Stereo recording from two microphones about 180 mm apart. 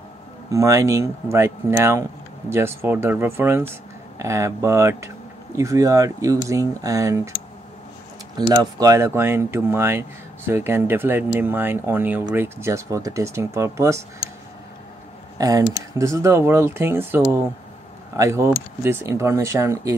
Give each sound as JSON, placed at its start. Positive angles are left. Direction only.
{"t": 0.5, "sound": "speech", "side_deg": -15}
{"t": 8.4, "sound": "speech", "side_deg": -20}
{"t": 15.3, "sound": "speech", "side_deg": -20}